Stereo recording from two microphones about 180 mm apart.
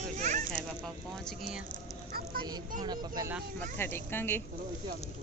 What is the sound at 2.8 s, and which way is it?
Speech, 20° right (ahead or behind).